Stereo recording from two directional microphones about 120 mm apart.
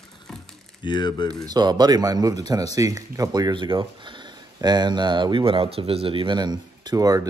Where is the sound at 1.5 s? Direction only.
35° right (ahead or behind).